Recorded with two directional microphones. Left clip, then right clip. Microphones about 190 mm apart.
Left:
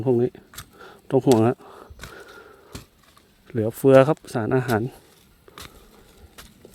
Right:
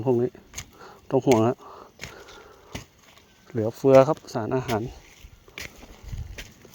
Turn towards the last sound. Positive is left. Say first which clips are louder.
# left 4 dB
turn(degrees=45)  # may be behind; listen again after turning